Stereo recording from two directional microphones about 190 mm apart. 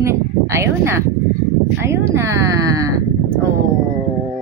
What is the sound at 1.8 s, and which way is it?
Speech, 15° right (ahead or behind).